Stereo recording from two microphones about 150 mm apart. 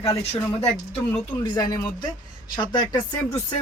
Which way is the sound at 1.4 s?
25° left (ahead or behind).